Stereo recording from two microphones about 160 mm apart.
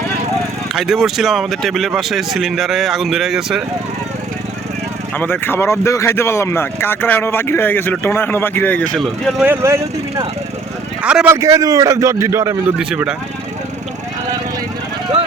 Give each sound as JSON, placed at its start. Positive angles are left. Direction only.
{"t": 0.8, "sound": "speech", "side_deg": 0}
{"t": 5.1, "sound": "speech", "side_deg": 10}
{"t": 9.4, "sound": "speech", "side_deg": -15}
{"t": 11.0, "sound": "speech", "side_deg": -5}
{"t": 11.3, "sound": "a man's voice", "side_deg": -20}
{"t": 12.8, "sound": "speech", "side_deg": -5}